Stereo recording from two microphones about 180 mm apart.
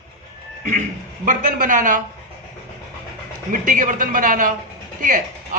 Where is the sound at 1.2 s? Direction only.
50° right (ahead or behind).